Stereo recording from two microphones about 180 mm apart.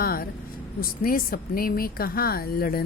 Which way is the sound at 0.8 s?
55° left (ahead or behind).